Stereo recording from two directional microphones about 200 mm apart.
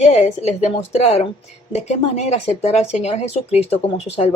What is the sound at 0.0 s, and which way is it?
Speech, 35° left (ahead or behind).